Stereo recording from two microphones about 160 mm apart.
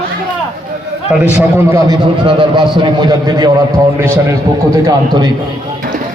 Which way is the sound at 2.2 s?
30° right (ahead or behind).